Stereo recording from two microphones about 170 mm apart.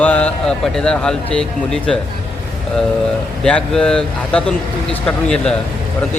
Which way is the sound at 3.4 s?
5° left (ahead or behind).